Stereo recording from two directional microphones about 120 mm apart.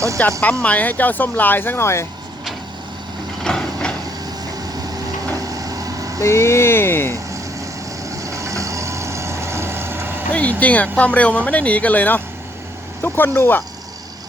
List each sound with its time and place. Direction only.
0.3 s speech: 5° left (ahead or behind); by 2.0 s 20° left (ahead or behind)
3.4 s a sound: 5° left (ahead or behind)
5.5 s vehicle: 30° right (ahead or behind)
6.2 s vehicle: 20° left (ahead or behind)
8.1 s vehicle: 25° right (ahead or behind)
10.3 s speech: 10° left (ahead or behind)